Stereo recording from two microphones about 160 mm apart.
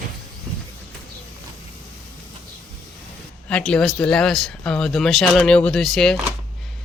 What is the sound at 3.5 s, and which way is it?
Speech, 5° left (ahead or behind).